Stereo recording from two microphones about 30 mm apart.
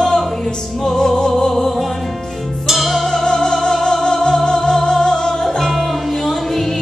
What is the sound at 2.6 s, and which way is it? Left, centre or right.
Music, centre.